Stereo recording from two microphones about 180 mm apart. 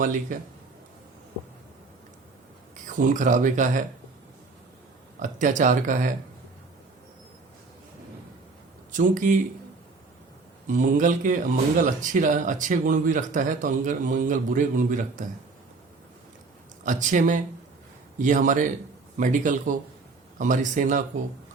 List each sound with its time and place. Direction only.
0.0 s speech: 45° right (ahead or behind)
2.8 s speech: 45° right (ahead or behind)
5.2 s speech: 45° right (ahead or behind)
8.9 s speech: 45° right (ahead or behind)
10.7 s speech: 45° right (ahead or behind)
16.8 s speech: 45° right (ahead or behind)